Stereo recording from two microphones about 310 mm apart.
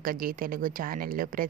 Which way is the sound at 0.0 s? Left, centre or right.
Right.